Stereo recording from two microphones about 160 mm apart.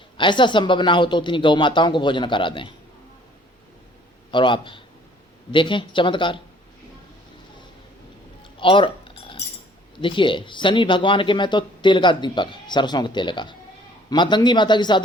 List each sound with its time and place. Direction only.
0.2 s speech: 30° left (ahead or behind)
4.3 s speech: 30° left (ahead or behind)
8.5 s cutlery: 30° left (ahead or behind)
10.0 s speech: 30° left (ahead or behind)